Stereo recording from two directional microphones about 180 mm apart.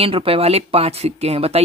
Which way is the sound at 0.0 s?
30° right (ahead or behind).